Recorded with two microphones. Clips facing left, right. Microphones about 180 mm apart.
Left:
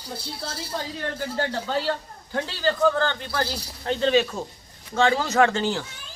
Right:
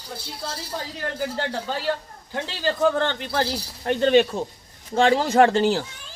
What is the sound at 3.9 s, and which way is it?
Speech, 55° right (ahead or behind).